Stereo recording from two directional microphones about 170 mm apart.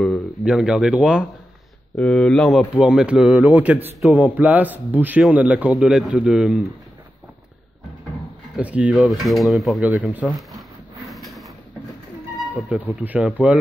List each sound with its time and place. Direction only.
0.0 s a man's voice: centre (ahead or behind)
8.5 s speech: 10° right (ahead or behind)
11.1 s sliding door: centre (ahead or behind)
12.7 s a man's voice: 5° right (ahead or behind)